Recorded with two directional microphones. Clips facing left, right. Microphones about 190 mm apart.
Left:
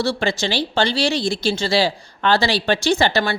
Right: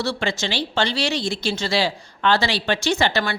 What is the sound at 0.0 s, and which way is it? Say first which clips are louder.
Speech: left 3 dB; 35° left (ahead or behind).